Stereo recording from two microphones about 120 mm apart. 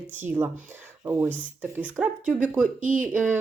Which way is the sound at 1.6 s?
10° right (ahead or behind).